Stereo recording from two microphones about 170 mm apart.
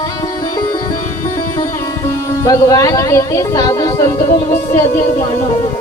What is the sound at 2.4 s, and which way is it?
Speech, 20° left (ahead or behind).